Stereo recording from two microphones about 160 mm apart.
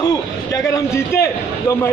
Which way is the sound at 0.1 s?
20° left (ahead or behind).